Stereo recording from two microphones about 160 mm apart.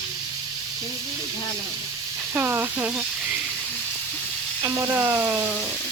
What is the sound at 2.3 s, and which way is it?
Speech, 15° right (ahead or behind).